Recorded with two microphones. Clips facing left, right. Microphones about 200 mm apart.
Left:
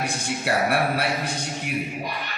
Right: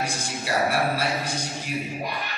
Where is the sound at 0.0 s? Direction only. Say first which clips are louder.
Left 3 dB; 60° left (ahead or behind).